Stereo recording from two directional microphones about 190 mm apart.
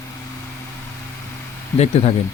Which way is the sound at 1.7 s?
30° left (ahead or behind).